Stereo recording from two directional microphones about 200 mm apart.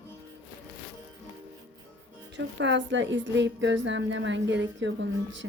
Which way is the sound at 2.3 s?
60° right (ahead or behind).